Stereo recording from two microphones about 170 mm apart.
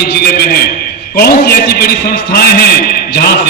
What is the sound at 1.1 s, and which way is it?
A man's voice, 65° left (ahead or behind).